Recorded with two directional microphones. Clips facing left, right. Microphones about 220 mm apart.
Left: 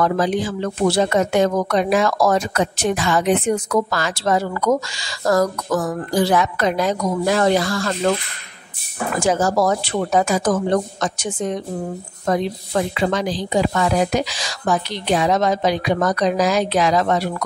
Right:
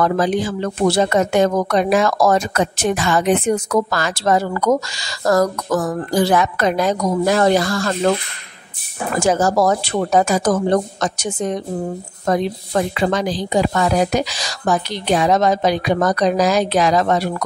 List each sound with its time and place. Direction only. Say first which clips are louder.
0.0 s speech: right 1 dB; 45° right (ahead or behind)
9.2 s a woman's voice: right 2 dB; 40° right (ahead or behind)
12.9 s a woman's voice: right 2 dB; 45° right (ahead or behind)